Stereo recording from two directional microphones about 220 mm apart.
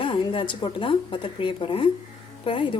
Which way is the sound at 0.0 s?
20° left (ahead or behind).